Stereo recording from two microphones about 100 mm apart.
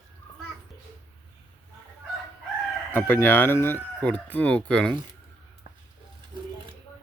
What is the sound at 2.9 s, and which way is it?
Speech, 25° left (ahead or behind).